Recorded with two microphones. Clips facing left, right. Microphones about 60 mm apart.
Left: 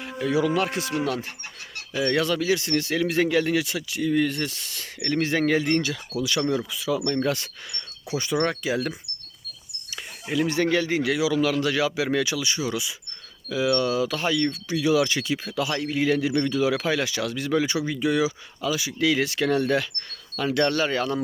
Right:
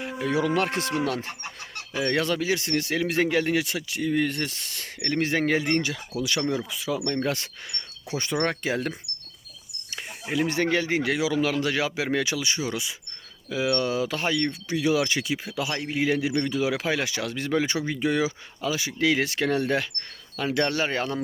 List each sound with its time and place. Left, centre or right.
0.3 s speech: right
9.9 s speech: right